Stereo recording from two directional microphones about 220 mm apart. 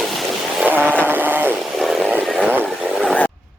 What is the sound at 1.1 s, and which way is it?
Chainsaw, 10° right (ahead or behind).